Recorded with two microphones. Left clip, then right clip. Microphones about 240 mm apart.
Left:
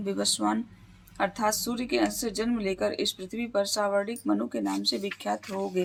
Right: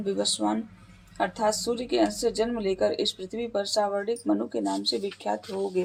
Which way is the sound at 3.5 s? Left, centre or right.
Left.